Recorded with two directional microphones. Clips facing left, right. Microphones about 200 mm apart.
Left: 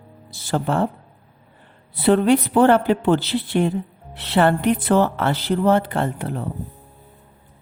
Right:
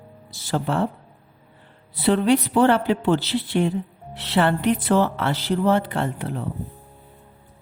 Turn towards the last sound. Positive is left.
turn(degrees=50)  # may be behind; listen again after turning